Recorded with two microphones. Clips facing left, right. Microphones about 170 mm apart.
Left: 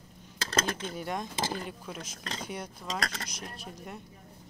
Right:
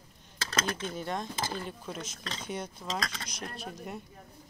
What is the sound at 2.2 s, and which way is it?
Speech, 40° left (ahead or behind).